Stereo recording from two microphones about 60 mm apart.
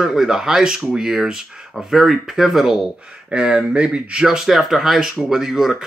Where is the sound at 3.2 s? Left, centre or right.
Centre.